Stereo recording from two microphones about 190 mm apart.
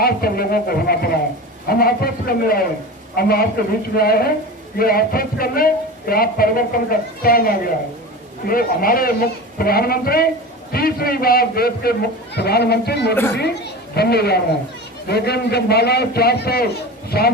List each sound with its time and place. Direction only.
0.0 s a man's voice: 55° left (ahead or behind)